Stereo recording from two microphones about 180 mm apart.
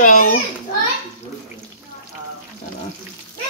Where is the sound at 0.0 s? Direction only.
50° left (ahead or behind).